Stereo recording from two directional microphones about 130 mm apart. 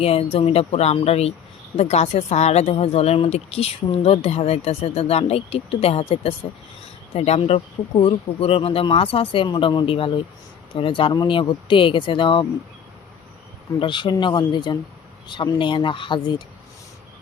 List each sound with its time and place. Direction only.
0.0 s a woman's voice: 50° left (ahead or behind)
13.7 s speech: 40° left (ahead or behind)